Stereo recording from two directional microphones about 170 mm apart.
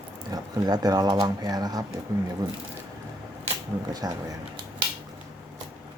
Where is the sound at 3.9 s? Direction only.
20° right (ahead or behind).